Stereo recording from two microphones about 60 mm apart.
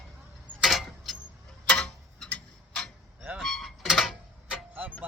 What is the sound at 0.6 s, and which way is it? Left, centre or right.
Keys jangling, centre.